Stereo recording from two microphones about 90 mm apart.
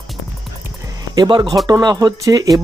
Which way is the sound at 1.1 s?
55° right (ahead or behind).